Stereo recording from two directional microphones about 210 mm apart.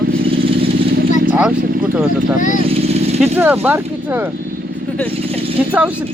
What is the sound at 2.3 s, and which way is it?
Speech, 40° left (ahead or behind).